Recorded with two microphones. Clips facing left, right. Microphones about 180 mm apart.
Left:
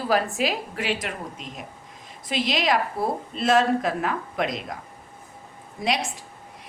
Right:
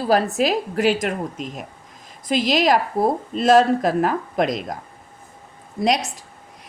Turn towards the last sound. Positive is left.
turn(degrees=-40)  # may be behind; listen again after turning